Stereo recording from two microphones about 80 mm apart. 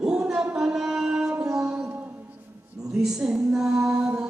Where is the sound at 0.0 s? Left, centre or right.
Centre.